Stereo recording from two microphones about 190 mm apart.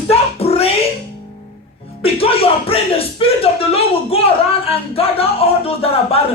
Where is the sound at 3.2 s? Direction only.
30° left (ahead or behind).